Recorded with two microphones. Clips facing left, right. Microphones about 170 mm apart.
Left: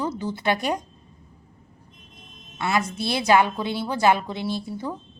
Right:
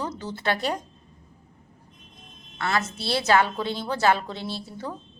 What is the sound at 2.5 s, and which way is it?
A woman's voice, 10° left (ahead or behind).